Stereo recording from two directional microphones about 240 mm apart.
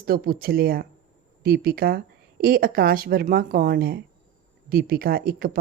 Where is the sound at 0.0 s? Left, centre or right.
Right.